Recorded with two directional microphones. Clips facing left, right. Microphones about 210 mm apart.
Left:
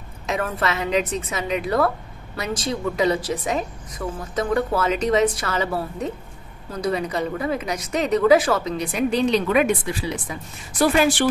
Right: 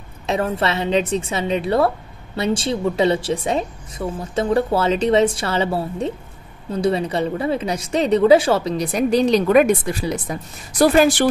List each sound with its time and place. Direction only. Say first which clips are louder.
0.3 s a woman's voice: right 4 dB; 30° right (ahead or behind)